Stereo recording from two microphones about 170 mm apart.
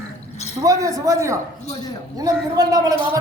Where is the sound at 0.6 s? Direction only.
20° right (ahead or behind).